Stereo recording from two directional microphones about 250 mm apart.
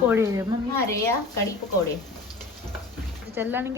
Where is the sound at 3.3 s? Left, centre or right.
Centre.